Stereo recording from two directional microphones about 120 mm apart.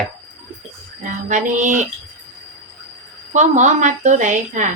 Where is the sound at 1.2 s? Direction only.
90° right.